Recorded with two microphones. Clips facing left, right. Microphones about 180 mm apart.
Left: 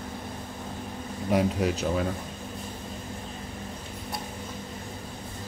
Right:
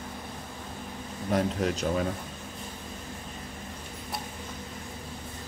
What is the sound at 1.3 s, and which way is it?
Speech, 10° left (ahead or behind).